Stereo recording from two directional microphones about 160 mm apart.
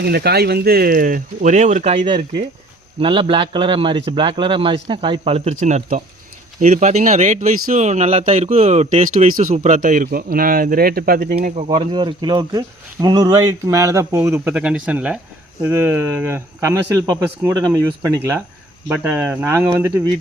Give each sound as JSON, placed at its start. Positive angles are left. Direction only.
{"t": 0.0, "sound": "speech", "side_deg": -85}
{"t": 2.0, "sound": "a man's voice", "side_deg": -30}
{"t": 9.8, "sound": "speech", "side_deg": -65}
{"t": 11.5, "sound": "speech", "side_deg": -45}
{"t": 11.9, "sound": "speech", "side_deg": -30}